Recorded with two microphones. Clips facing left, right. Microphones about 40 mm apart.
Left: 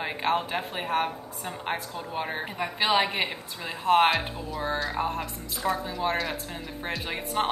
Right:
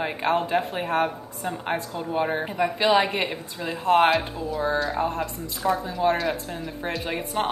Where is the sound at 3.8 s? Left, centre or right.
Left.